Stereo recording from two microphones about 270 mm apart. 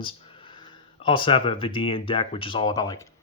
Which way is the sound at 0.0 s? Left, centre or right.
Centre.